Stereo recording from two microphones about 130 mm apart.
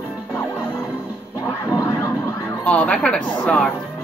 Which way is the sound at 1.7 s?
25° left (ahead or behind).